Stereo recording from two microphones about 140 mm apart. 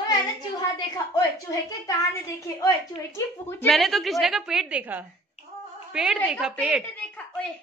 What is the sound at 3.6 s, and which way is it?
A woman's voice, centre (ahead or behind).